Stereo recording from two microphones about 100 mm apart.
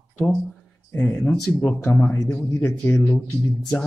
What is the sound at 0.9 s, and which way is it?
Speech, 15° left (ahead or behind).